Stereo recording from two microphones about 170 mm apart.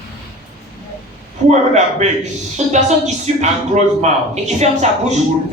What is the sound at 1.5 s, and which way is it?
A man's voice, 40° right (ahead or behind).